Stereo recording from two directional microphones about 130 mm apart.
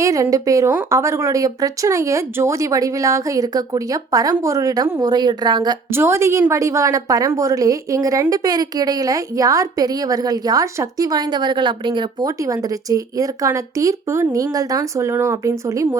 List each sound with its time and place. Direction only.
0.0 s a woman's voice: 25° right (ahead or behind)
5.9 s a woman's voice: 20° right (ahead or behind)